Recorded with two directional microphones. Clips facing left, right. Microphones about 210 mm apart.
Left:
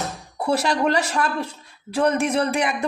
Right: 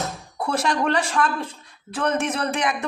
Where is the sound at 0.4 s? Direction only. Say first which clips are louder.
Left 2 dB; 10° left (ahead or behind).